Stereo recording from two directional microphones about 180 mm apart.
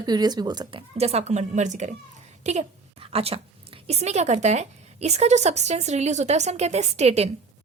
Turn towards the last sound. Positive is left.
turn(degrees=-35)  # may be behind; listen again after turning